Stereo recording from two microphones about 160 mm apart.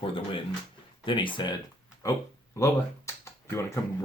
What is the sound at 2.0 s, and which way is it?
Speech, 20° left (ahead or behind).